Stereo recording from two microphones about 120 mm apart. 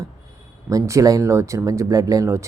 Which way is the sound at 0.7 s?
25° right (ahead or behind).